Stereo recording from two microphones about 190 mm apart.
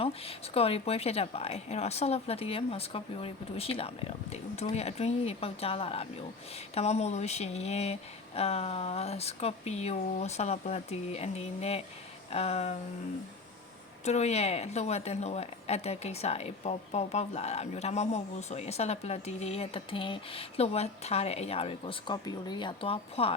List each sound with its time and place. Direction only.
0.0 s speech: 30° left (ahead or behind)
14.0 s speech: 35° left (ahead or behind)